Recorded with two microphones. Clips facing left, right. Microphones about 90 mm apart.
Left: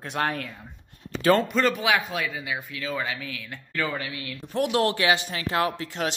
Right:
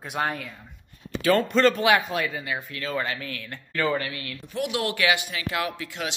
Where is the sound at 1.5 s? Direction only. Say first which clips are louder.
Right 3 dB; 5° left (ahead or behind).